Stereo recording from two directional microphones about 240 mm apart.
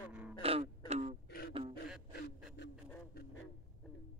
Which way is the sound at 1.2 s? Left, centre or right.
Left.